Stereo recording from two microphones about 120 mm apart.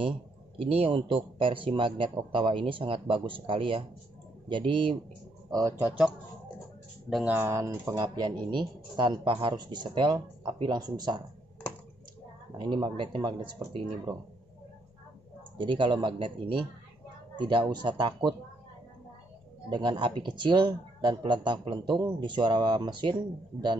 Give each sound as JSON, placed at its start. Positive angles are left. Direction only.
{"t": 0.6, "sound": "speech", "side_deg": -50}
{"t": 5.5, "sound": "speech", "side_deg": -25}
{"t": 7.2, "sound": "speech", "side_deg": -20}
{"t": 12.5, "sound": "speech", "side_deg": -40}
{"t": 15.5, "sound": "speech", "side_deg": -45}
{"t": 19.7, "sound": "speech", "side_deg": -40}